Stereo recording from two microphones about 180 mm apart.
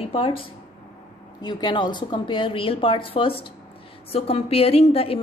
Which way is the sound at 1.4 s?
25° left (ahead or behind).